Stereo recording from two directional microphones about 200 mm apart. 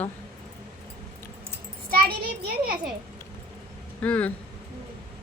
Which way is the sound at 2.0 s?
45° right (ahead or behind).